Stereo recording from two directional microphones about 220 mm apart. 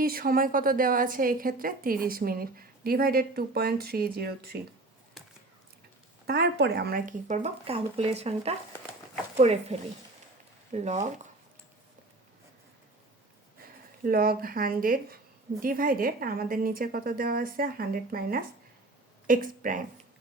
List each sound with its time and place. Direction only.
0.0 s a woman's voice: 40° right (ahead or behind)
6.2 s a woman's voice: 50° right (ahead or behind); by 11.3 s 30° right (ahead or behind)
14.0 s a woman's voice: 40° right (ahead or behind)